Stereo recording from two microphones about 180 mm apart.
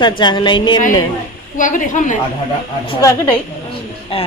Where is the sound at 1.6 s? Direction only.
45° left (ahead or behind).